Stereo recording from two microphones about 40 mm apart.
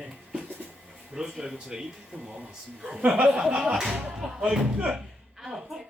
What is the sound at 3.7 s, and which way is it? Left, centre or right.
Speech, centre.